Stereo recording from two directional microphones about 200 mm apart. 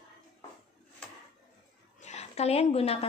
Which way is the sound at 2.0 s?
35° left (ahead or behind).